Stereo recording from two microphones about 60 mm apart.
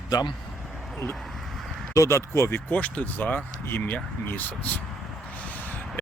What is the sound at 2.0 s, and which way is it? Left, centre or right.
Speech, left.